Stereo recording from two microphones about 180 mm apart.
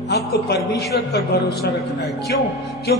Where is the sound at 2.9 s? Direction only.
60° left (ahead or behind).